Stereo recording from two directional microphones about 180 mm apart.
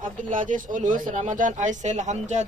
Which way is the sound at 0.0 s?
45° right (ahead or behind).